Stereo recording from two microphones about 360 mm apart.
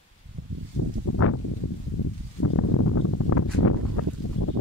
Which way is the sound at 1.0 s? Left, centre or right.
Left.